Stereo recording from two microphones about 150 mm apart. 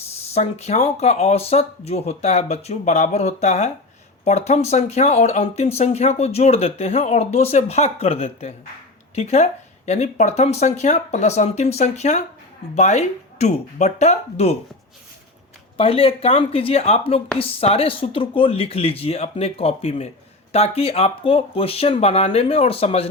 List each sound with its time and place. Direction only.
0.3 s speech: 45° left (ahead or behind)
15.8 s speech: 40° left (ahead or behind)